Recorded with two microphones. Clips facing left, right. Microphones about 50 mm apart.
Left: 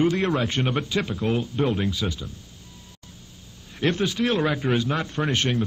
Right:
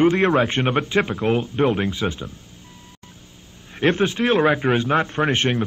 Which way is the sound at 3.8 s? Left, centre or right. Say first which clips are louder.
Right 4 dB; right.